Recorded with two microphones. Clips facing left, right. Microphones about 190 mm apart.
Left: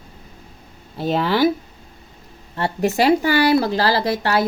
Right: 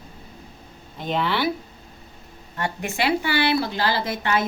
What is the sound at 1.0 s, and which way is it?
Speech, 40° left (ahead or behind).